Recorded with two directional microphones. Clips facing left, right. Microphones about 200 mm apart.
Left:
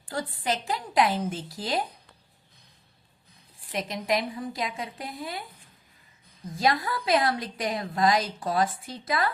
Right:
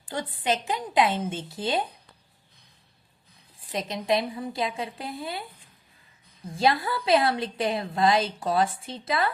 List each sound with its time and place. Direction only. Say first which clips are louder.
0.1 s a woman's voice: right 2 dB; 20° right (ahead or behind)
3.7 s a woman's voice: right 2 dB; 25° right (ahead or behind)
6.5 s a woman's voice: right 2 dB; 30° right (ahead or behind)